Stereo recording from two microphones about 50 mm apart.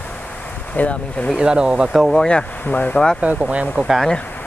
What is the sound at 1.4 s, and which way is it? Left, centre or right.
Speech, centre.